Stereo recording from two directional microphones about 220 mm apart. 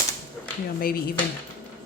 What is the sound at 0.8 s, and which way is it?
Speech, 40° left (ahead or behind).